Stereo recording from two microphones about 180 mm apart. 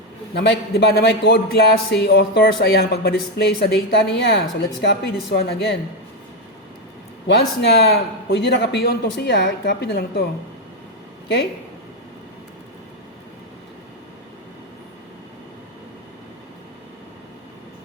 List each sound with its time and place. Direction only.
0.3 s a man's voice: 70° left (ahead or behind)
7.3 s a man's voice: 70° left (ahead or behind)